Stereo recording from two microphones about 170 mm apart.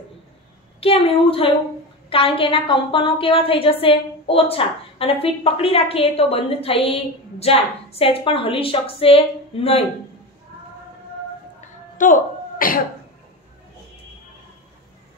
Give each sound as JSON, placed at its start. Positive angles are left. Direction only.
{"t": 0.7, "sound": "a woman's voice", "side_deg": 35}
{"t": 12.0, "sound": "speech", "side_deg": 55}